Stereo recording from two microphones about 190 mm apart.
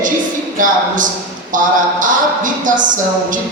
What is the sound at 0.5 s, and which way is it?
A woman's voice, 45° right (ahead or behind).